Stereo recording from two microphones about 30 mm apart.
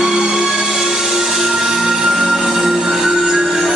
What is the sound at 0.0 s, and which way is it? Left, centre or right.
Music, centre.